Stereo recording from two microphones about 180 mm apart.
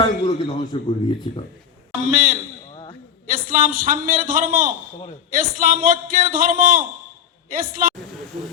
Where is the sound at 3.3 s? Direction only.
55° right (ahead or behind).